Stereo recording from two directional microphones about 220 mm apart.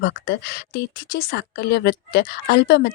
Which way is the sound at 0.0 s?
50° left (ahead or behind).